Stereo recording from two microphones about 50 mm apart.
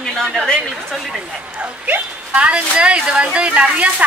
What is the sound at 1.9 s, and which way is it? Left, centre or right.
A woman's voice, right.